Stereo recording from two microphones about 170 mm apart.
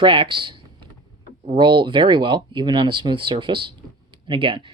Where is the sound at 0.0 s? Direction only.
30° right (ahead or behind).